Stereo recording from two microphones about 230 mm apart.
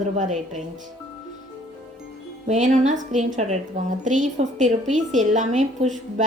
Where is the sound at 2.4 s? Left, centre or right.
Right.